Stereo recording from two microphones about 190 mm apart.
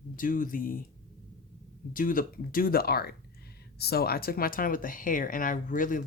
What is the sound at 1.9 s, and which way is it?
Speech, 45° left (ahead or behind).